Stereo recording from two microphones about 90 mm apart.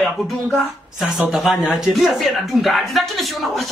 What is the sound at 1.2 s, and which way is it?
Speech, 5° right (ahead or behind).